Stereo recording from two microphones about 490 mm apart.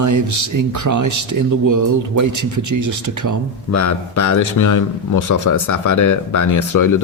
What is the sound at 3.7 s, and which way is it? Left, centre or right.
Speech, left.